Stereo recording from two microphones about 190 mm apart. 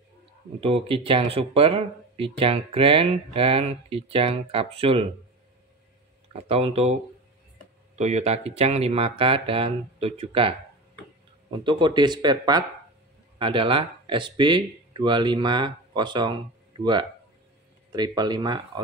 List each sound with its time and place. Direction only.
0.6 s speech: 30° right (ahead or behind)
6.3 s speech: 30° right (ahead or behind)
11.5 s speech: 25° right (ahead or behind)
17.9 s speech: 20° right (ahead or behind)